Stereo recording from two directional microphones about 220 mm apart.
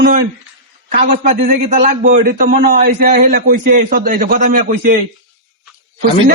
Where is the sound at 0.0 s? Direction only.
40° right (ahead or behind).